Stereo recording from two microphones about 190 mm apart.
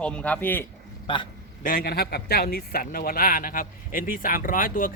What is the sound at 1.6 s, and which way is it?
Speech, 50° left (ahead or behind).